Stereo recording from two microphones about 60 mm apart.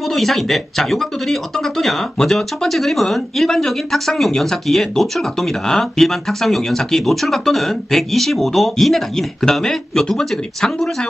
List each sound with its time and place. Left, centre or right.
0.0 s speech: centre